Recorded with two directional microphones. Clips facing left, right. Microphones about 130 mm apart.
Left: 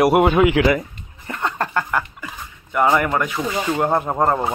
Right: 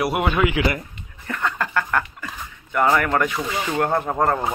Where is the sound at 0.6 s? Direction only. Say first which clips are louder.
Left 5 dB; 50° left (ahead or behind).